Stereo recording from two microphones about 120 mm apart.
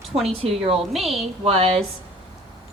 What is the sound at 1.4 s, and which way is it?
Speech, 55° right (ahead or behind).